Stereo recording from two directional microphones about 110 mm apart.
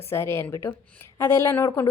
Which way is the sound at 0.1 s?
25° left (ahead or behind).